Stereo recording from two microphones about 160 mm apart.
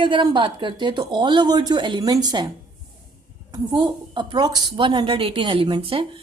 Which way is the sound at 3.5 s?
30° right (ahead or behind).